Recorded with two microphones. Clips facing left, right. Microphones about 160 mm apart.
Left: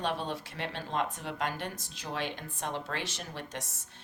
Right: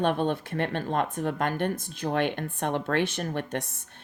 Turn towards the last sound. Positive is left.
turn(degrees=-60)  # may be behind; listen again after turning